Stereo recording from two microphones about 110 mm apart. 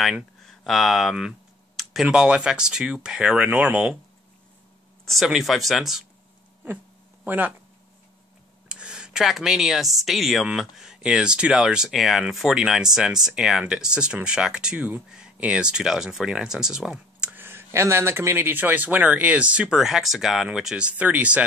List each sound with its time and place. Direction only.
0.0 s speech: centre (ahead or behind)
5.0 s speech: centre (ahead or behind)
7.2 s speech: 15° right (ahead or behind)
8.6 s speech: 10° right (ahead or behind)